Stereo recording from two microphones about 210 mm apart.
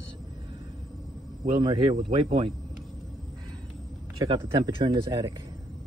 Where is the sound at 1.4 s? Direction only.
25° right (ahead or behind).